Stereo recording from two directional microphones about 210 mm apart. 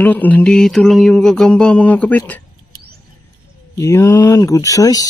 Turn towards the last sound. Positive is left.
turn(degrees=15)  # may be behind; listen again after turning